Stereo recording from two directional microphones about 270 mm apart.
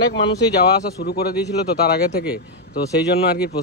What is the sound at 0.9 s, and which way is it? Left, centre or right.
Speech, left.